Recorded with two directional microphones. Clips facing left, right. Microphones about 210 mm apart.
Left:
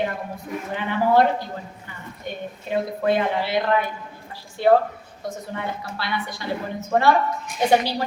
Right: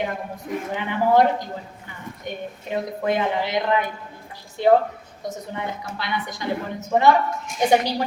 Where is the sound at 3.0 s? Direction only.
15° right (ahead or behind).